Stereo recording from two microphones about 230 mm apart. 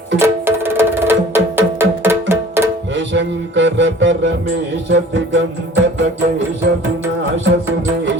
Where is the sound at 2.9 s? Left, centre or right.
Right.